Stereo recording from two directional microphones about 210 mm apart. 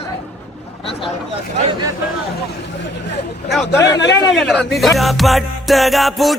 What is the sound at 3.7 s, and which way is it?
Speech, 15° left (ahead or behind).